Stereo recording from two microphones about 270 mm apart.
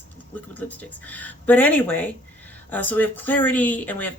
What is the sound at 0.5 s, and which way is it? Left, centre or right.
Speech, centre.